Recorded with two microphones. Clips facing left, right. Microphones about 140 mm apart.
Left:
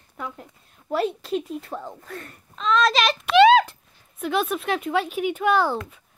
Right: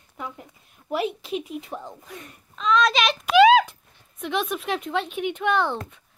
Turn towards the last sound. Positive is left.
turn(degrees=5)  # may be behind; listen again after turning